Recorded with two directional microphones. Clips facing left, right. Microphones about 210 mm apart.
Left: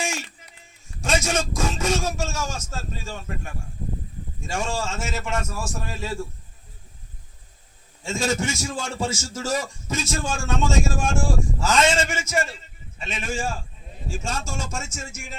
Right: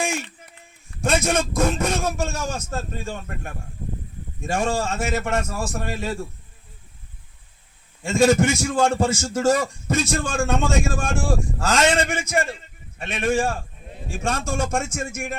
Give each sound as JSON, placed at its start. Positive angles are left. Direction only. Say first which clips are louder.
{"t": 0.0, "sound": "a sound", "louder": "right 4 dB", "side_deg": -55}
{"t": 1.0, "sound": "a man's voice", "louder": "right 3 dB", "side_deg": -60}
{"t": 8.0, "sound": "a man's voice", "louder": "right 8 dB", "side_deg": -60}